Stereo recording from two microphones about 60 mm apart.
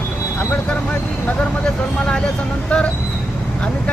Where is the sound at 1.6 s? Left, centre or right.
Centre.